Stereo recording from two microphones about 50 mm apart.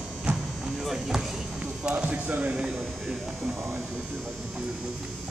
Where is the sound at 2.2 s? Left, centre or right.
Right.